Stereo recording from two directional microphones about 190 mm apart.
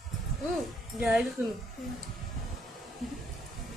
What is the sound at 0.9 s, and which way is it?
Speech, 5° right (ahead or behind).